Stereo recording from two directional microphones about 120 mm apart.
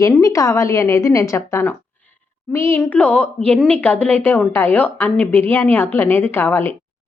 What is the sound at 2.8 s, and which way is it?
Speech, 10° left (ahead or behind).